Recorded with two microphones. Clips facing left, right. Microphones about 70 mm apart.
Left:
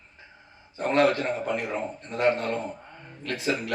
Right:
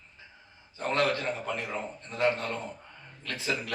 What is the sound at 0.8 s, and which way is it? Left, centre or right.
A man's voice, left.